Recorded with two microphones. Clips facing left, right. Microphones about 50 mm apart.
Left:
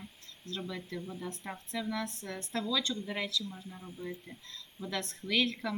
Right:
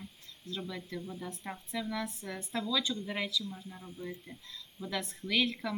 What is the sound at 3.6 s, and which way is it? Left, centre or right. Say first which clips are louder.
Speech: left 1 dB; left.